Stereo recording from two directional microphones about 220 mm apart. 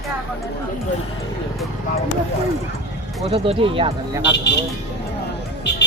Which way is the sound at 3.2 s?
25° right (ahead or behind).